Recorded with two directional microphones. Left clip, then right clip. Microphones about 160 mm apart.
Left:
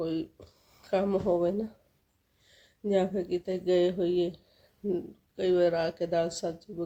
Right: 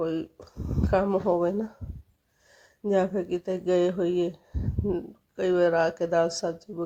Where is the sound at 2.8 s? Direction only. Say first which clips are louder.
Right 3 dB; 15° right (ahead or behind).